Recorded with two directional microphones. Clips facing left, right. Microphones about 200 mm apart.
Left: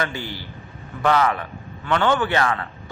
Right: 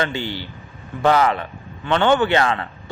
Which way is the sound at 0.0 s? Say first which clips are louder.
Right 4 dB; 25° right (ahead or behind).